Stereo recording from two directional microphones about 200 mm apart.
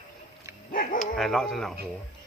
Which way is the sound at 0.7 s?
40° left (ahead or behind).